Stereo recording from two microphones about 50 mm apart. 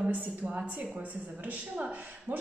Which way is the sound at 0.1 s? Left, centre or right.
Right.